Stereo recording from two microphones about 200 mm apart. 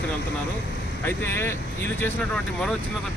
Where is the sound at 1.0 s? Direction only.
10° left (ahead or behind).